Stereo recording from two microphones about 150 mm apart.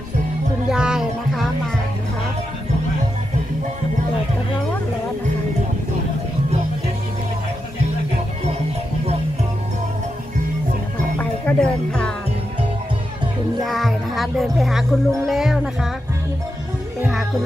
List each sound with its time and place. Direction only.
0.7 s music: 5° right (ahead or behind)
11.1 s music: 10° left (ahead or behind)
13.6 s speech: centre (ahead or behind)
17.0 s music: centre (ahead or behind)